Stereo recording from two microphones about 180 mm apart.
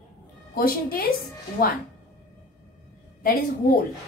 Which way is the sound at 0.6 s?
55° left (ahead or behind).